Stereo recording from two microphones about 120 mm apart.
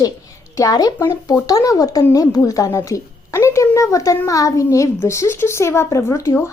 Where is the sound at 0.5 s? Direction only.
30° left (ahead or behind).